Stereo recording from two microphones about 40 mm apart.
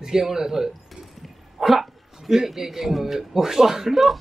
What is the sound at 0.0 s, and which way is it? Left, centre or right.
A man's voice, centre.